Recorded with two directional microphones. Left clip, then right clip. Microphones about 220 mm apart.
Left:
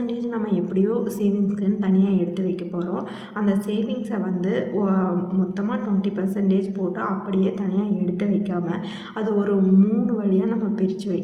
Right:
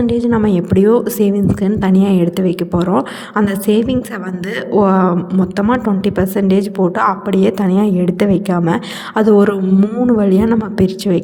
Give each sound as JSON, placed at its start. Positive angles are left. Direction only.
{"t": 0.1, "sound": "a woman's voice", "side_deg": -45}